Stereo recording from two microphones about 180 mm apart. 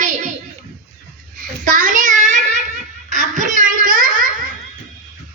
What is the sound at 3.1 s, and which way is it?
Belly laugh, 45° right (ahead or behind).